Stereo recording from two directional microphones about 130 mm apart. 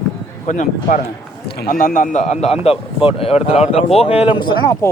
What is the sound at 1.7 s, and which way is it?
Speech, 90° left.